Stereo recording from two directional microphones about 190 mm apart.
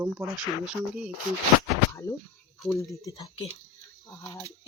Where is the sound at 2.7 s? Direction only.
15° left (ahead or behind).